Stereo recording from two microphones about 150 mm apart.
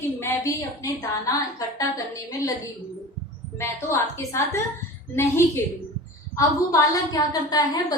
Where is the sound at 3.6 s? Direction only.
15° left (ahead or behind).